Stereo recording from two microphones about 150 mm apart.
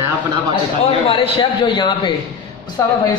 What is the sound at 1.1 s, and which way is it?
A man's voice, 35° left (ahead or behind).